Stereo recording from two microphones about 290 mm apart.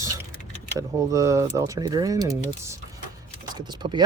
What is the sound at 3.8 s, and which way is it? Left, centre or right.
Speech, right.